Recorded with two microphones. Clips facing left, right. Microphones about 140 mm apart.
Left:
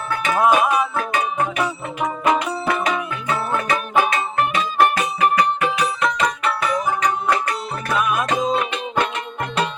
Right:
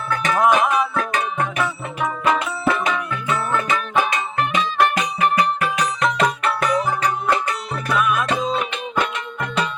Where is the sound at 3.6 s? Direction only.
35° left (ahead or behind).